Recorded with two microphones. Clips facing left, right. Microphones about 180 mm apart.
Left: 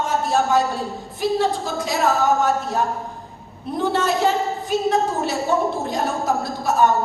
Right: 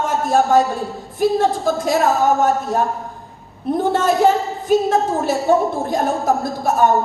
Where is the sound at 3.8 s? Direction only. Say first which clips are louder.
Right 4 dB; 50° right (ahead or behind).